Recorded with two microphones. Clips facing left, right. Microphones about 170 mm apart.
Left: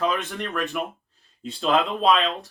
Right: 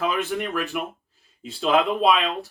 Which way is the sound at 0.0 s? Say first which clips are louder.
Right 1 dB; centre (ahead or behind).